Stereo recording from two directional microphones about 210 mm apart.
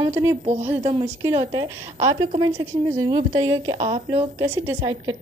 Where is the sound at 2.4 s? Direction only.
15° right (ahead or behind).